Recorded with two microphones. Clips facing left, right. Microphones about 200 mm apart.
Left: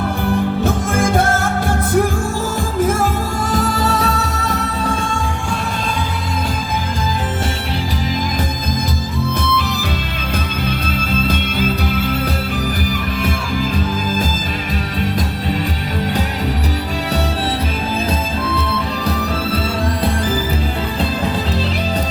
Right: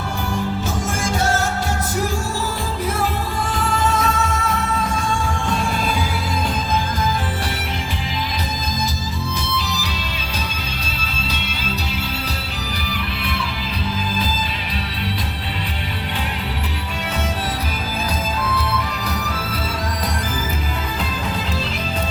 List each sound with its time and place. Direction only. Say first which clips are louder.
0.6 s music: left 7 dB; 55° left (ahead or behind)
3.5 s music: left 3 dB; 40° left (ahead or behind)
11.1 s music: left 10 dB; 50° left (ahead or behind)